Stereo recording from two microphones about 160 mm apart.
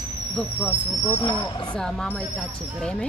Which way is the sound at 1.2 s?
30° left (ahead or behind).